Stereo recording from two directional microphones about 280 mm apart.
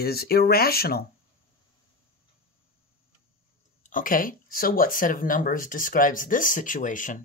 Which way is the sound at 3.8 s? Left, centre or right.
Left.